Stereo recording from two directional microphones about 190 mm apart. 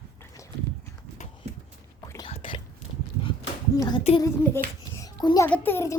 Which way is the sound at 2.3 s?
30° left (ahead or behind).